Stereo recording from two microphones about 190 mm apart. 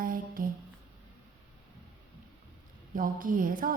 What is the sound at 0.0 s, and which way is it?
Music, 45° right (ahead or behind).